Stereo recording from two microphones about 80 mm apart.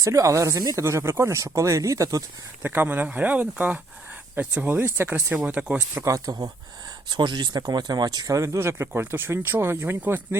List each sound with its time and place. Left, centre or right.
0.0 s speech: right
0.9 s speech: right
2.6 s speech: right
6.1 s speech: right
7.1 s speech: right
8.5 s speech: right